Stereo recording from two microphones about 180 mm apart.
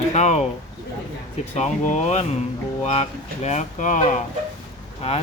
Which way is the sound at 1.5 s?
40° left (ahead or behind).